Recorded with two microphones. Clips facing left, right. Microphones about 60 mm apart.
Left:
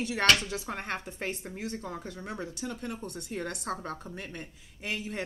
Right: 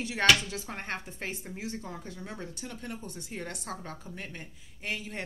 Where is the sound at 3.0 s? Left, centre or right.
Left.